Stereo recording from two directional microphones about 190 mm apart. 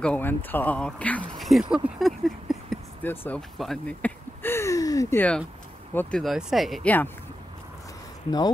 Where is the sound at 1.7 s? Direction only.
Centre (ahead or behind).